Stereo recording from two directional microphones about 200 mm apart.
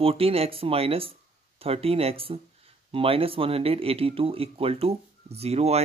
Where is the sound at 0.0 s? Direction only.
30° right (ahead or behind).